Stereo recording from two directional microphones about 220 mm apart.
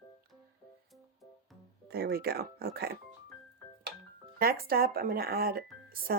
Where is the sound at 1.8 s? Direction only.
45° right (ahead or behind).